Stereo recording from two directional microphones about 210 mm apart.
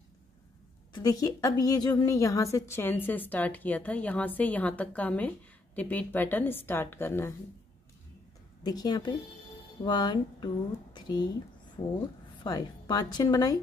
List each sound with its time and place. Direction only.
0.9 s a woman's voice: 20° left (ahead or behind)
8.6 s speech: 20° left (ahead or behind)
12.4 s a woman's voice: 20° left (ahead or behind)